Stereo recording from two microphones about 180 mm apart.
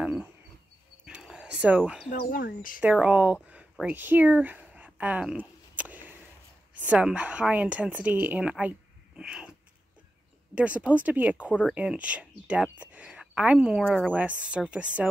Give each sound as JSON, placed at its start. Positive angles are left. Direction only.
{"t": 0.0, "sound": "wild animals", "side_deg": -5}
{"t": 1.0, "sound": "a sound", "side_deg": -5}
{"t": 2.0, "sound": "speech", "side_deg": 55}
{"t": 2.8, "sound": "a woman's voice", "side_deg": -5}
{"t": 3.4, "sound": "a sound", "side_deg": -5}
{"t": 6.7, "sound": "a woman's voice", "side_deg": -5}
{"t": 10.5, "sound": "a woman's voice", "side_deg": -5}